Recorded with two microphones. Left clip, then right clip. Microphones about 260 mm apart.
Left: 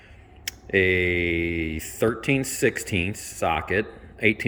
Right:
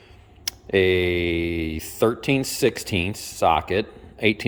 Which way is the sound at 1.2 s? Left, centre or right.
Centre.